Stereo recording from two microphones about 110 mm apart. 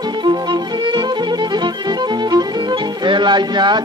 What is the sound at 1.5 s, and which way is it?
Music, 40° right (ahead or behind).